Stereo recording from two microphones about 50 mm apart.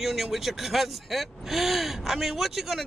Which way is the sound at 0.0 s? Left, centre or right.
Centre.